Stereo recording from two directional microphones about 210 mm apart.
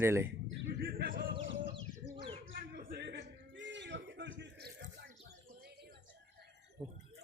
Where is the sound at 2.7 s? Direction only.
45° right (ahead or behind).